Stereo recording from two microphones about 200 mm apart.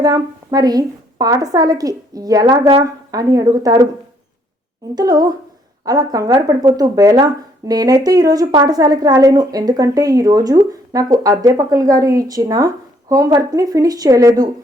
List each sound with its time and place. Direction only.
0.0 s speech: 20° right (ahead or behind)
4.9 s a woman's voice: 20° right (ahead or behind)